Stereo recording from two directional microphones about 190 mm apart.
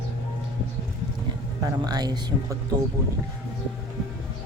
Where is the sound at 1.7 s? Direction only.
20° right (ahead or behind).